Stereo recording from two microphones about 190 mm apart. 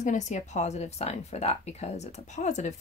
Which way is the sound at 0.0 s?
40° left (ahead or behind).